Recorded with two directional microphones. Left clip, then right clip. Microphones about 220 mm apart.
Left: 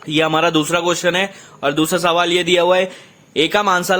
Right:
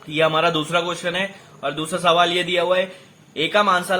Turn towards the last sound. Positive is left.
turn(degrees=50)  # may be behind; listen again after turning